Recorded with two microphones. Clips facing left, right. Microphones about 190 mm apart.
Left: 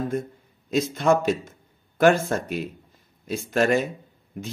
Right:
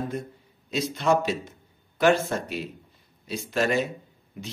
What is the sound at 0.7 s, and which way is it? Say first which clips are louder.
A man's voice: left 3 dB; 45° left (ahead or behind).